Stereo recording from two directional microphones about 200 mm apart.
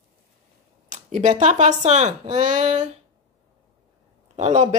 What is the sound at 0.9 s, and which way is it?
A woman's voice, 35° right (ahead or behind).